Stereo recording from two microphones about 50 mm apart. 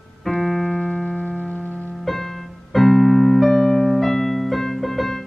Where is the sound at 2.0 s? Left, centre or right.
Centre.